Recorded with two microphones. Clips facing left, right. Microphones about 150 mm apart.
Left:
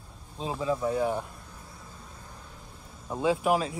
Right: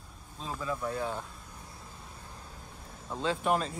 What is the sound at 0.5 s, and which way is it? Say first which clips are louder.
Speech: left 6 dB; 15° left (ahead or behind).